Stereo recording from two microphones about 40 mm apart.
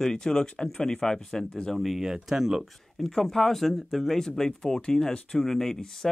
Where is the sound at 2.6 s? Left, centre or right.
Centre.